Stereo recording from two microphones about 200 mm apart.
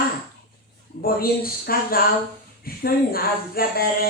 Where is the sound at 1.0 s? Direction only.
45° left (ahead or behind).